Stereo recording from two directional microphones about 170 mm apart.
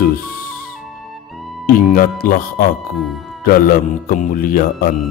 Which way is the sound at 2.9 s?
Centre (ahead or behind).